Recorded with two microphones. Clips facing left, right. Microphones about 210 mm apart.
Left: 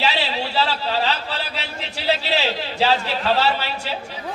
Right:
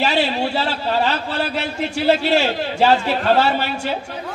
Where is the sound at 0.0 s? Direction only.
50° right (ahead or behind).